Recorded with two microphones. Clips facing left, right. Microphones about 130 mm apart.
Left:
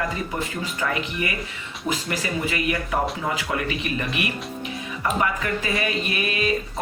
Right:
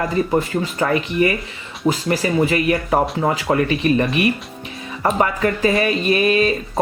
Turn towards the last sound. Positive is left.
turn(degrees=-35)  # may be behind; listen again after turning